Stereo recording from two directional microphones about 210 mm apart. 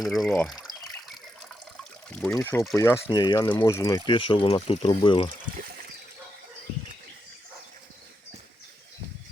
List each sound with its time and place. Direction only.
0.0 s water: centre (ahead or behind)
1.8 s trickle: 5° left (ahead or behind)
2.3 s speech: 15° left (ahead or behind)